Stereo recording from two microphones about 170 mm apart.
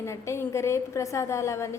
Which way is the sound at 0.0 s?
15° left (ahead or behind).